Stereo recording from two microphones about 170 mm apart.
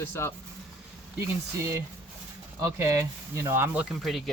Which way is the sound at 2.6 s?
20° right (ahead or behind).